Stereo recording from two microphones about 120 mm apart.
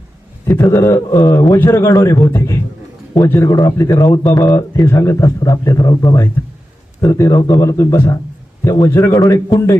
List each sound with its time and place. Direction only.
0.6 s a man's voice: 25° left (ahead or behind)